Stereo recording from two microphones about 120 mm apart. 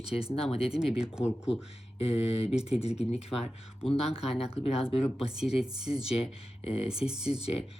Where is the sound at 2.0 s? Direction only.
55° left (ahead or behind).